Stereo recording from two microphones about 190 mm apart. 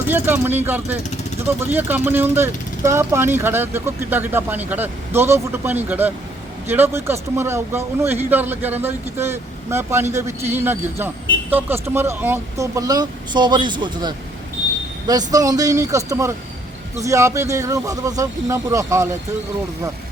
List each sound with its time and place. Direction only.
0.1 s speech: 10° right (ahead or behind)